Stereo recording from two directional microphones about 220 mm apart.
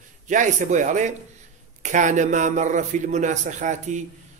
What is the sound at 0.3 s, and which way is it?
Speech, 35° right (ahead or behind).